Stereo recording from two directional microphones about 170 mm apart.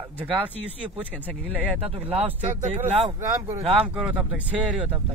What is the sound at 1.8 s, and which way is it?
Speech, 35° right (ahead or behind).